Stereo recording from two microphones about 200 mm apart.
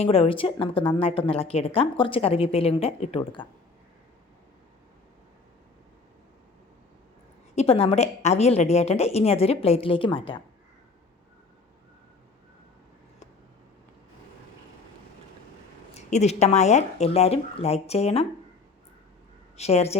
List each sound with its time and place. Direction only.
0.0 s a woman's voice: 30° left (ahead or behind)
7.5 s a woman's voice: 30° left (ahead or behind)
16.0 s a woman's voice: 35° left (ahead or behind)
19.5 s a woman's voice: 30° left (ahead or behind)